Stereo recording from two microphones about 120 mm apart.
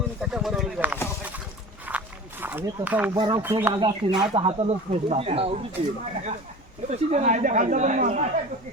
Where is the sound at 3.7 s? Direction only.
35° right (ahead or behind).